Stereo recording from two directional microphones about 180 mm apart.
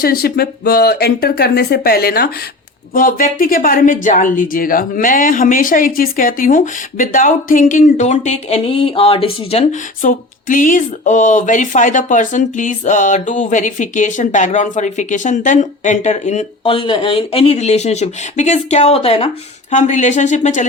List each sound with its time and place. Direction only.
0.0 s speech: 60° left (ahead or behind)
2.9 s speech: 50° left (ahead or behind); by 9.6 s 30° left (ahead or behind)
10.0 s speech: 50° left (ahead or behind)